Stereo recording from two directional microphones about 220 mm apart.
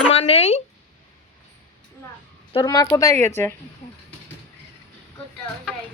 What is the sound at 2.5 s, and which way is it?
Speech, 15° left (ahead or behind).